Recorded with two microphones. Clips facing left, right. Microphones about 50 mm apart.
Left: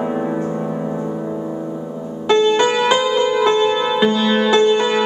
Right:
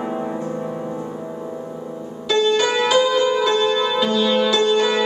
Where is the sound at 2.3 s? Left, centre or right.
Left.